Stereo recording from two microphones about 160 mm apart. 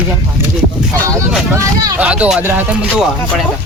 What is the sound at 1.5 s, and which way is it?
Speech, 20° right (ahead or behind).